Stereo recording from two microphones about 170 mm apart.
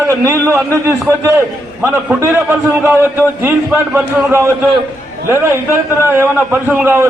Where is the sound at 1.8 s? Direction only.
15° right (ahead or behind).